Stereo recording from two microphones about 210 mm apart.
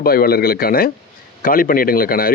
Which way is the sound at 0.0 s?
45° left (ahead or behind).